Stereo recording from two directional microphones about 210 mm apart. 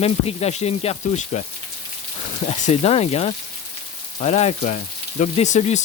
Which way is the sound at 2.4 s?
30° left (ahead or behind).